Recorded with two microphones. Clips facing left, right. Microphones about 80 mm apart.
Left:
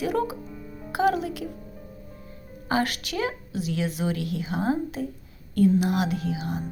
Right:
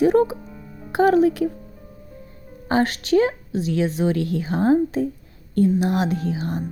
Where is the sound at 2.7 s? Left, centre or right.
Right.